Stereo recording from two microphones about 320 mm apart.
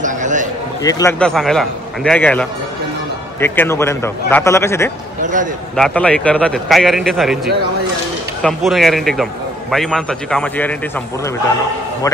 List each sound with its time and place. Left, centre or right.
0.0 s a sound: right
0.8 s a man's voice: centre
5.2 s a man's voice: right
5.8 s a man's voice: centre
8.4 s a man's voice: centre